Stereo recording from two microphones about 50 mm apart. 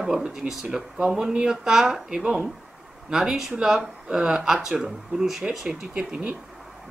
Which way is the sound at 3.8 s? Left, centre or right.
Right.